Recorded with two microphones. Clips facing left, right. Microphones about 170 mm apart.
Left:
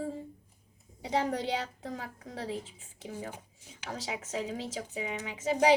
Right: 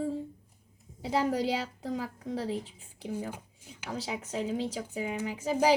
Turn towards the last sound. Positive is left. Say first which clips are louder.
# even
turn(degrees=0)  # may be behind; listen again after turning